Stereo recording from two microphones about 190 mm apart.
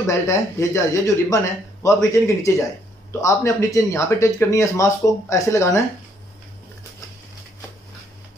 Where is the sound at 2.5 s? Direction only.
15° left (ahead or behind).